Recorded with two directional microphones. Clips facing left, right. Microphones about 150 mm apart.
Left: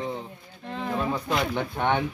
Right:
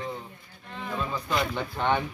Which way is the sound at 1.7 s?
20° left (ahead or behind).